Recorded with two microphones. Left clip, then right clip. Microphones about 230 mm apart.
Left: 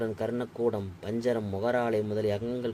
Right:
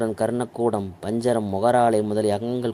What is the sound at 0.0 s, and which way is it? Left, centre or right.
Speech, right.